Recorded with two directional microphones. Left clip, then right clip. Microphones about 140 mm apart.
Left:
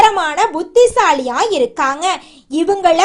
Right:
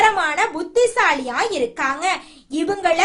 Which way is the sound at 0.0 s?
35° left (ahead or behind).